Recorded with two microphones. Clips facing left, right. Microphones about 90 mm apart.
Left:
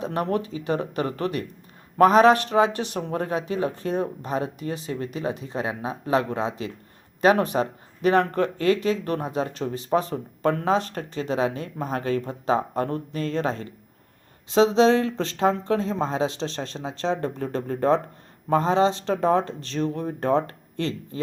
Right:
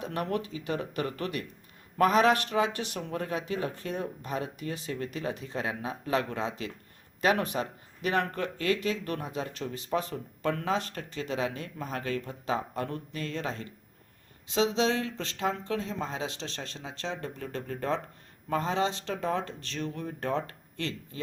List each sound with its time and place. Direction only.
0.0 s speech: 30° left (ahead or behind)